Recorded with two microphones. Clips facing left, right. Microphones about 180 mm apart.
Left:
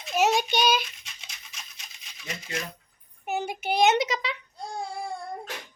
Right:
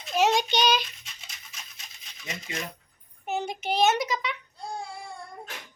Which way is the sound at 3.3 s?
10° left (ahead or behind).